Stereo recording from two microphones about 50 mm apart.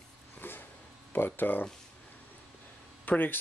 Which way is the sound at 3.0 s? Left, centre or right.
Left.